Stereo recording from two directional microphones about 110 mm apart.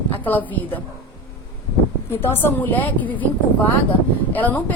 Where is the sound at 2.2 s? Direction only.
20° left (ahead or behind).